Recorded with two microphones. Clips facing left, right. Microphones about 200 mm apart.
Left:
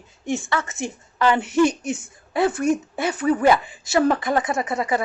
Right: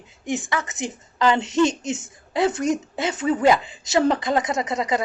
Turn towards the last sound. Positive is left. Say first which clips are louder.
# even
turn(degrees=-20)  # may be behind; listen again after turning